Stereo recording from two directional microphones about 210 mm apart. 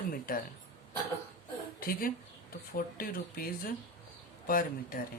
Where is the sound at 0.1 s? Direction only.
40° left (ahead or behind).